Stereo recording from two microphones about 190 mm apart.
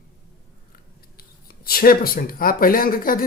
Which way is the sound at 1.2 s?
50° left (ahead or behind).